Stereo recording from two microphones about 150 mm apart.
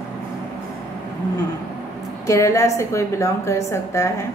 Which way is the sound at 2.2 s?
20° left (ahead or behind).